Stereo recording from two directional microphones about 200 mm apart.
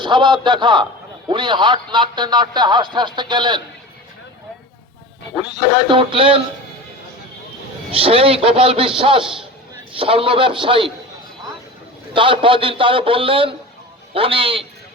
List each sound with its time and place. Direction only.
0.0 s a man's voice: 25° right (ahead or behind)
5.5 s a man's voice: 30° right (ahead or behind)
7.9 s a man's voice: 30° right (ahead or behind)
12.1 s a man's voice: 25° right (ahead or behind)